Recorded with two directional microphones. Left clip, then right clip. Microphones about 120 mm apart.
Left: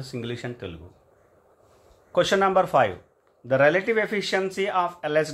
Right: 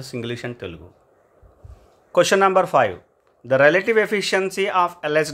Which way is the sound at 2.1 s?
50° right (ahead or behind).